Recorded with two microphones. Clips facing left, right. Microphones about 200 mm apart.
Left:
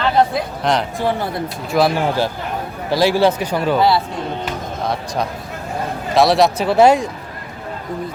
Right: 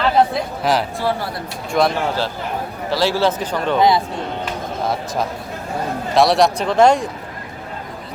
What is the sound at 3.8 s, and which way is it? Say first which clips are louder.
Speech: right 2 dB; 15° right (ahead or behind).